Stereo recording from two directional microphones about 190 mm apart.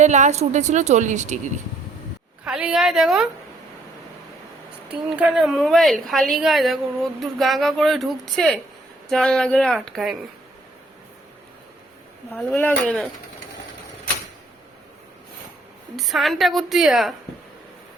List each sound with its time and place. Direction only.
0.0 s speech: 40° right (ahead or behind)
2.4 s a woman's voice: 5° right (ahead or behind)
4.9 s a woman's voice: 5° right (ahead or behind)
12.3 s speech: 10° left (ahead or behind)
16.0 s a woman's voice: centre (ahead or behind)